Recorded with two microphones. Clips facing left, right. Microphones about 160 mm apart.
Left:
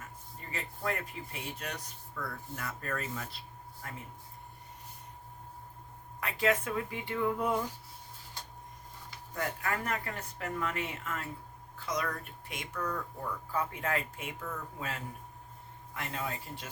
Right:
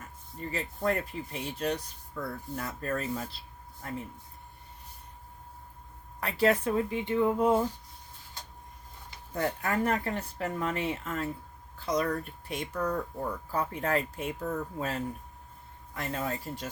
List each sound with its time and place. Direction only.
0.5 s speech: 35° right (ahead or behind)
6.1 s speech: 35° right (ahead or behind)
9.3 s speech: 30° right (ahead or behind)